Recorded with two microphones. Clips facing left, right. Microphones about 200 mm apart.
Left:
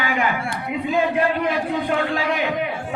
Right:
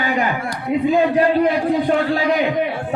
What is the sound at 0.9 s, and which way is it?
A man's voice, 35° right (ahead or behind).